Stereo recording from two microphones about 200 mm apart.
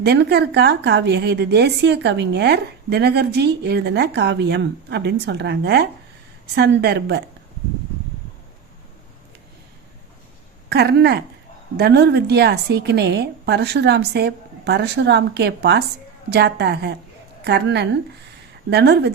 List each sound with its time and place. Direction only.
0.0 s a woman's voice: 55° right (ahead or behind)
10.7 s a woman's voice: 55° right (ahead or behind)